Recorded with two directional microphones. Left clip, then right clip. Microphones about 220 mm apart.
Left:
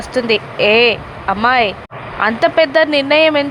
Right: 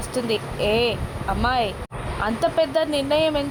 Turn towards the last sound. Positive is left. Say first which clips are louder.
# left 9 dB
turn(degrees=15)  # may be behind; listen again after turning